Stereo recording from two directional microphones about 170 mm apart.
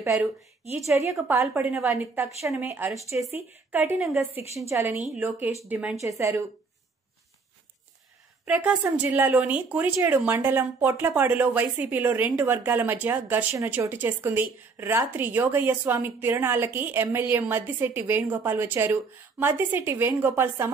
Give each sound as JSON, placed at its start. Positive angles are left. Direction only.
{"t": 1.0, "sound": "speech", "side_deg": 0}
{"t": 1.3, "sound": "a woman's voice", "side_deg": -15}
{"t": 5.9, "sound": "a woman's voice", "side_deg": -15}
{"t": 8.5, "sound": "a woman's voice", "side_deg": -10}